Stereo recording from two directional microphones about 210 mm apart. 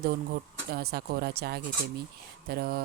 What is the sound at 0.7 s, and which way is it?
Speech, 50° right (ahead or behind).